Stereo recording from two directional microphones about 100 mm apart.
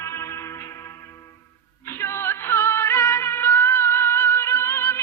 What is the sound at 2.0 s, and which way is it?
Music, 25° left (ahead or behind).